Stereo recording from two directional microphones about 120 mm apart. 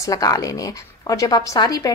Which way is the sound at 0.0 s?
30° left (ahead or behind).